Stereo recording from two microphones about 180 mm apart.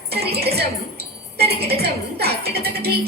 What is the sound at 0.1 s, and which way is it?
A woman's voice, 60° right (ahead or behind).